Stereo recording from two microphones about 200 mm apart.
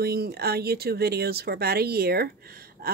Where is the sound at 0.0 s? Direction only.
50° right (ahead or behind).